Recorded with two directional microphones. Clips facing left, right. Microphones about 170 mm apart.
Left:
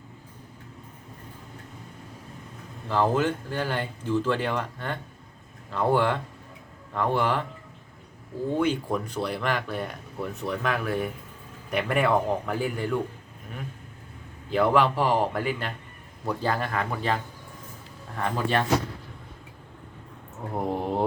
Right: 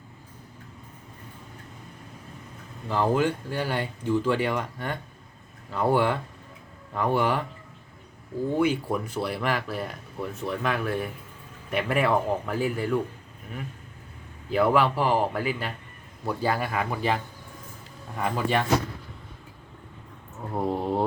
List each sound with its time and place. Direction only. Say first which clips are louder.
2.9 s speech: even; 10° right (ahead or behind)
8.5 s speech: right 1 dB; 10° right (ahead or behind)
14.5 s speech: even; 5° right (ahead or behind)
18.2 s speech: even; 10° right (ahead or behind)
20.5 s mantra: right 1 dB; 15° left (ahead or behind)